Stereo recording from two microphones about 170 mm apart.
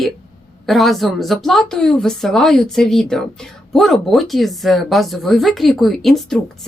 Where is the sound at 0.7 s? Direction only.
Centre (ahead or behind).